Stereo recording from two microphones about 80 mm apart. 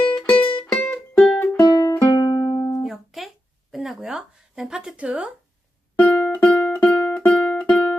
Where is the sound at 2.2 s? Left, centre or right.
Left.